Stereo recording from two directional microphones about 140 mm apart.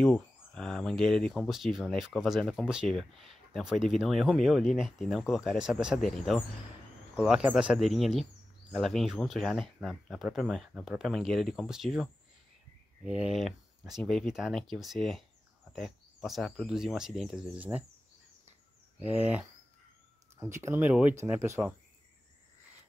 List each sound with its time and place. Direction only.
0.0 s speech: 5° left (ahead or behind)
18.9 s speech: 10° right (ahead or behind)